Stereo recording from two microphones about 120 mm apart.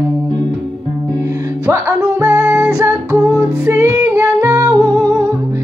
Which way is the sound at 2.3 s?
10° right (ahead or behind).